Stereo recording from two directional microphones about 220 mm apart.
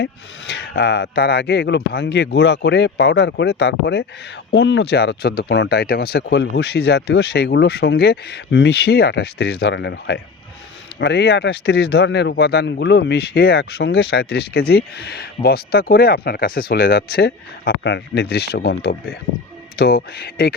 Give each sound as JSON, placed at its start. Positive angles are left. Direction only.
{"t": 0.0, "sound": "speech", "side_deg": 50}